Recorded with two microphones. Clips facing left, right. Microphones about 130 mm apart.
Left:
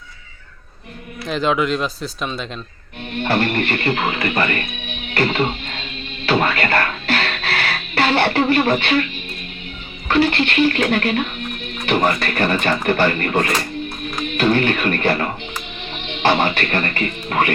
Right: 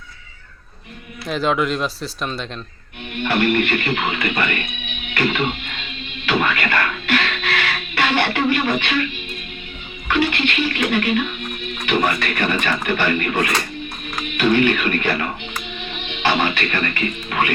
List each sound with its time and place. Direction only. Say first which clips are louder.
1.3 s speech: left 1 dB; centre (ahead or behind)
3.2 s speech: right 1 dB; 35° left (ahead or behind)
6.2 s music: left 2 dB; 35° left (ahead or behind)
10.1 s speech: left 3 dB; 40° left (ahead or behind)